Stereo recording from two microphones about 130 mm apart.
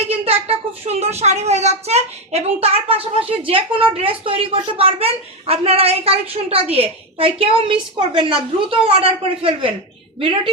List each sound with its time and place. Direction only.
0.1 s a woman's voice: 50° right (ahead or behind)